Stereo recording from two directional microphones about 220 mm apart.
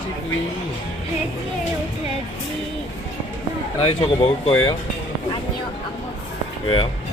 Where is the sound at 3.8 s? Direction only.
25° left (ahead or behind).